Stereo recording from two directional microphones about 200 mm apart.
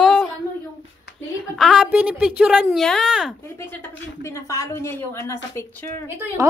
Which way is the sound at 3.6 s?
15° left (ahead or behind).